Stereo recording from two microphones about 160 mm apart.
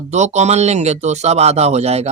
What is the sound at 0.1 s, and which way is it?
Speech, 45° right (ahead or behind).